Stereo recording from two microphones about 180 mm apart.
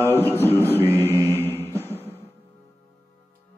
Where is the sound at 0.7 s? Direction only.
15° right (ahead or behind).